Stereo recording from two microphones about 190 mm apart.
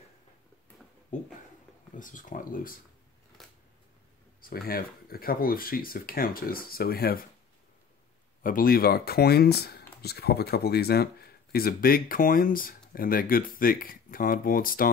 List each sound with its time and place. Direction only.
1.1 s speech: 40° left (ahead or behind)
3.4 s scissors: centre (ahead or behind)
4.4 s speech: 50° left (ahead or behind)
8.4 s speech: 45° left (ahead or behind)